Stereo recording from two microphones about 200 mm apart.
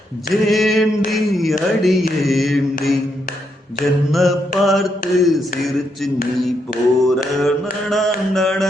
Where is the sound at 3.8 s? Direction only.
Centre (ahead or behind).